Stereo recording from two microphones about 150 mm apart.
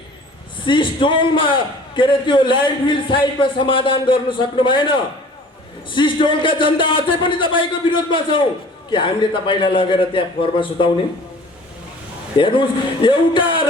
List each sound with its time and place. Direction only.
0.6 s a man's voice: 35° left (ahead or behind)
12.4 s a man's voice: 35° left (ahead or behind)